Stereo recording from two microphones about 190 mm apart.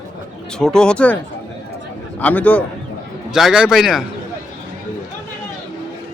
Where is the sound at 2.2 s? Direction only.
10° left (ahead or behind).